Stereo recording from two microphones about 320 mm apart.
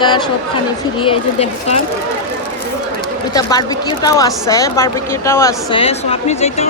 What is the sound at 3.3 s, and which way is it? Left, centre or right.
Speech, centre.